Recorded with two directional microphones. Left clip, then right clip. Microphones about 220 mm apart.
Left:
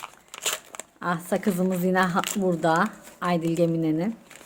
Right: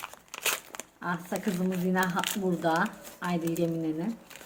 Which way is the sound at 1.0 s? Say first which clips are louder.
Left 7 dB; 50° left (ahead or behind).